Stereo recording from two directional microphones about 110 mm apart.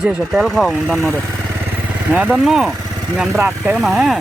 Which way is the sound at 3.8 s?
Centre (ahead or behind).